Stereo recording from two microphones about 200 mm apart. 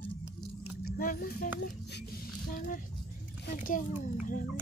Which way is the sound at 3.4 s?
40° left (ahead or behind).